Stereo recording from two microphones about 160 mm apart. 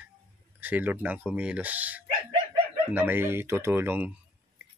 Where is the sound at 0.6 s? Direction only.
10° right (ahead or behind).